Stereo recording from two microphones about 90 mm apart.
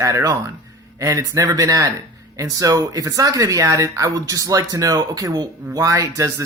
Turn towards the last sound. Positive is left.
turn(degrees=-35)  # may be behind; listen again after turning